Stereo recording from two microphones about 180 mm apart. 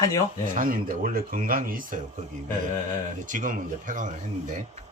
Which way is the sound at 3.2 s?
45° right (ahead or behind).